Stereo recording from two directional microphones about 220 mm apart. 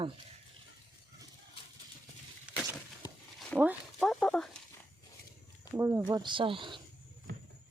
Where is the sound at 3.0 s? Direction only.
20° left (ahead or behind).